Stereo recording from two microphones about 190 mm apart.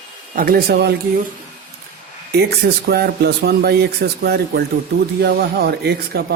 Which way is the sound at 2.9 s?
55° right (ahead or behind).